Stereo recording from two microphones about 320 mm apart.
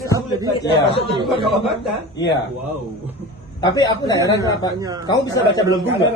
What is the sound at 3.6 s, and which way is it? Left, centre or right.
Speech, centre.